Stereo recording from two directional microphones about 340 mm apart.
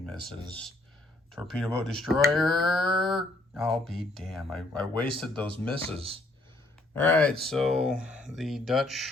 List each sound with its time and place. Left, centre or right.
1.3 s speech: centre
5.7 s speech: centre
6.9 s speech: centre